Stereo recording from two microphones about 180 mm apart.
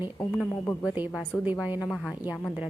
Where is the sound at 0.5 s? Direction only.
10° left (ahead or behind).